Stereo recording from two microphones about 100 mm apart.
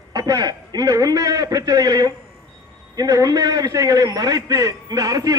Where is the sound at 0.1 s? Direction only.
40° right (ahead or behind).